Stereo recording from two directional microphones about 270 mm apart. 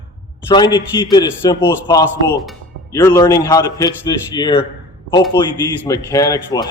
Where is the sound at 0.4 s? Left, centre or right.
Centre.